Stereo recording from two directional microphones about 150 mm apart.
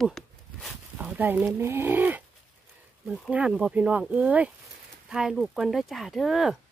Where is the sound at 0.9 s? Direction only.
10° right (ahead or behind).